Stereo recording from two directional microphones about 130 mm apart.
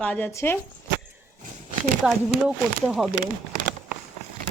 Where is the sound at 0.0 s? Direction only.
10° left (ahead or behind).